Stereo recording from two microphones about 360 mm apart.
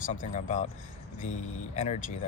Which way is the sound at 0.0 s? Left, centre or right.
Left.